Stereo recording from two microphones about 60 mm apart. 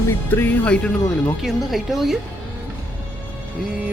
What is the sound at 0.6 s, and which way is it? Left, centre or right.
Speech, centre.